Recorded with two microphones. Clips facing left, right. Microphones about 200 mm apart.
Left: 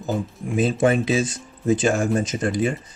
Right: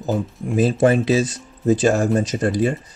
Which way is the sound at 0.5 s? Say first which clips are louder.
Right 3 dB; 40° right (ahead or behind).